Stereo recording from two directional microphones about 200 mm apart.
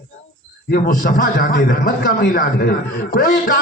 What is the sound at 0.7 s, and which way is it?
A man's voice, 45° left (ahead or behind).